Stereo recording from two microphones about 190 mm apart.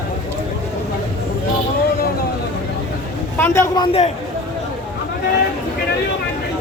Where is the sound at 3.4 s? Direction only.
20° left (ahead or behind).